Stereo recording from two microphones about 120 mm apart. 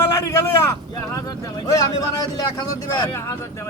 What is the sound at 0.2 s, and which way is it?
Speech, 25° left (ahead or behind).